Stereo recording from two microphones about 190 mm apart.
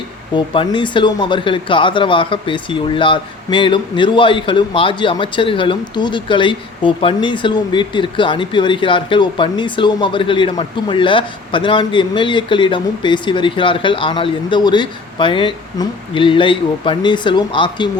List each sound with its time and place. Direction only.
0.3 s speech: 25° left (ahead or behind)